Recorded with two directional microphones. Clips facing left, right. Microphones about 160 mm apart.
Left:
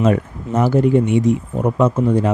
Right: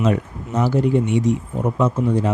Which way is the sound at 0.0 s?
55° left (ahead or behind).